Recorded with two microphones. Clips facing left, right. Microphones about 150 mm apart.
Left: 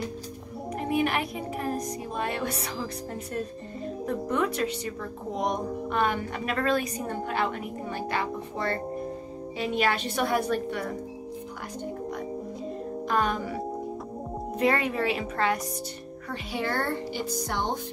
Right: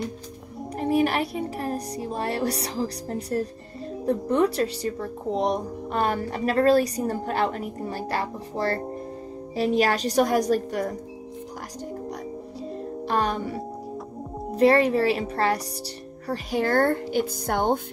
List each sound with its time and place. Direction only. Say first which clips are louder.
0.7 s speech: right 4 dB; 35° right (ahead or behind)
13.0 s music: right 2 dB; 35° right (ahead or behind)
14.6 s speech: right 7 dB; 35° right (ahead or behind); by 17.7 s 55° right (ahead or behind)